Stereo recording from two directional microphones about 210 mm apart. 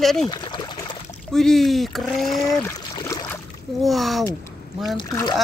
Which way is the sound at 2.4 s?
15° left (ahead or behind).